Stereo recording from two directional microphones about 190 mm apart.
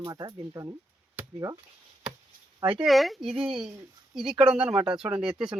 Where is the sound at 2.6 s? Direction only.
25° right (ahead or behind).